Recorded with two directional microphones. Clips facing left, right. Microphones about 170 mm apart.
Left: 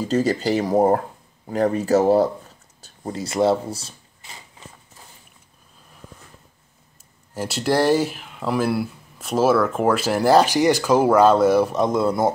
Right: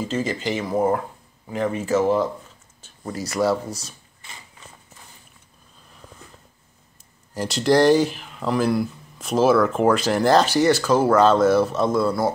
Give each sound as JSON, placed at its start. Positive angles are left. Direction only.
{"t": 0.0, "sound": "speech", "side_deg": 40}
{"t": 7.3, "sound": "speech", "side_deg": 5}